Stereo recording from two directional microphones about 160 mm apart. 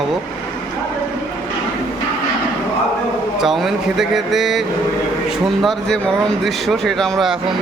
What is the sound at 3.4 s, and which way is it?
Speech, centre (ahead or behind).